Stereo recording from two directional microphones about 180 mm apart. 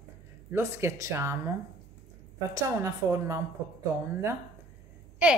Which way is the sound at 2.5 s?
15° right (ahead or behind).